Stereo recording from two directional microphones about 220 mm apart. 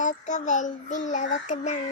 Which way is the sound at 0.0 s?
35° left (ahead or behind).